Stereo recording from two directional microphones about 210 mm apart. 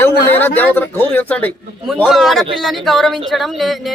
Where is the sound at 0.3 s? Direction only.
10° left (ahead or behind).